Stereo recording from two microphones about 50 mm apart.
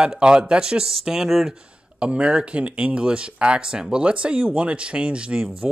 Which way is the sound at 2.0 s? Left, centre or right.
Right.